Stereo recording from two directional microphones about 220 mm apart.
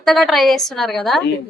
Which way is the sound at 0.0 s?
Centre (ahead or behind).